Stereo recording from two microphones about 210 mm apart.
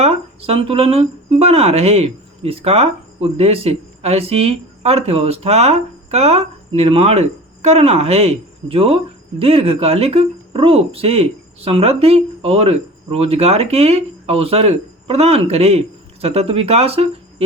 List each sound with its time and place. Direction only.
0.0 s speech: 30° right (ahead or behind)